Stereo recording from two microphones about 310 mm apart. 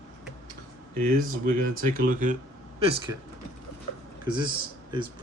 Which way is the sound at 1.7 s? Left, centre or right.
Right.